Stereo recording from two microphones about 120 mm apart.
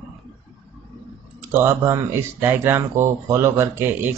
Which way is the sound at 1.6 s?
20° right (ahead or behind).